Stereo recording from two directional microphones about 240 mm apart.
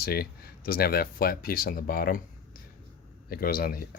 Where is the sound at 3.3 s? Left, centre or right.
Left.